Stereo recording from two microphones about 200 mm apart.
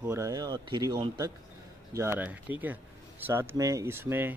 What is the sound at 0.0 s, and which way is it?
Speech, 15° right (ahead or behind).